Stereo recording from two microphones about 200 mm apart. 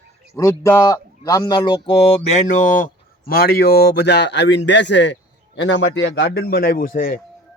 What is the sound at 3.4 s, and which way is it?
A man's voice, 50° left (ahead or behind).